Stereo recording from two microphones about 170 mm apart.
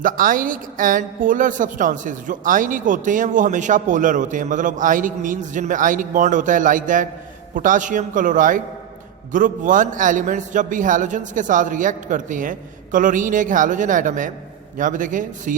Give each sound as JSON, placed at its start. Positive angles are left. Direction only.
{"t": 0.0, "sound": "a woman's voice", "side_deg": -55}